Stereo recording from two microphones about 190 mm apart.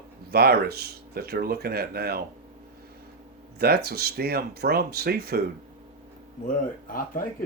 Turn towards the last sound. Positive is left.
turn(degrees=45)  # may be behind; listen again after turning